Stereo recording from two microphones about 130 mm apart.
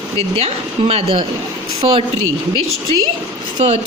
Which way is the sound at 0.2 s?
50° right (ahead or behind).